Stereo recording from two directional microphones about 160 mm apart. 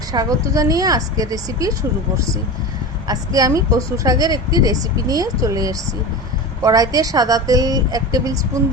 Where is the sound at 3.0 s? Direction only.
25° right (ahead or behind).